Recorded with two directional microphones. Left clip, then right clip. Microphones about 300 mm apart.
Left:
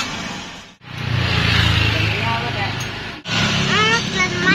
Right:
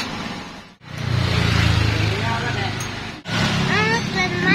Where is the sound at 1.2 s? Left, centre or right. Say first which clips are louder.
Left 4 dB; right.